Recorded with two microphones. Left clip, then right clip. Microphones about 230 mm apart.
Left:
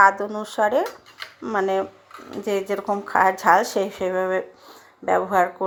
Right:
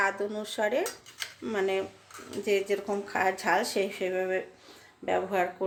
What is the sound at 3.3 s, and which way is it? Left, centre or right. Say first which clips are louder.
Speech: left 9 dB; centre.